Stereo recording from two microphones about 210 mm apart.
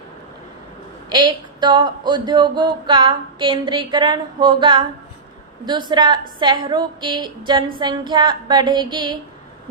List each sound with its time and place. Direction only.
1.1 s speech: 20° right (ahead or behind)
5.9 s speech: 20° right (ahead or behind)